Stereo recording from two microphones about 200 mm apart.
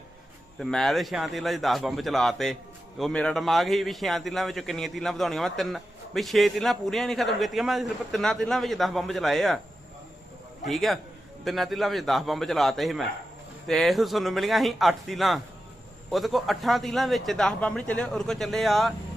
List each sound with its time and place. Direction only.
0.6 s a man's voice: centre (ahead or behind)
10.7 s a man's voice: centre (ahead or behind)